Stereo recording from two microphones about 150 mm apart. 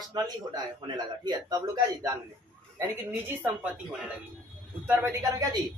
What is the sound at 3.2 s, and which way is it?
Speech, 10° right (ahead or behind).